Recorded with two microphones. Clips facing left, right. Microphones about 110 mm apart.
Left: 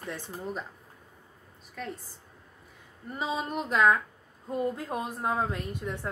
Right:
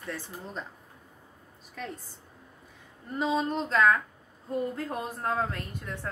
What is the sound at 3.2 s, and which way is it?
A woman's voice, 10° left (ahead or behind).